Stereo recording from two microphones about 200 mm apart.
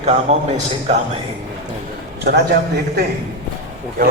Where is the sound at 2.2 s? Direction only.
50° right (ahead or behind).